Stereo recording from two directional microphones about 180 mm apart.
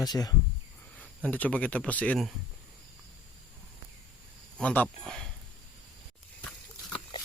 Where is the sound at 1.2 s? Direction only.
10° left (ahead or behind).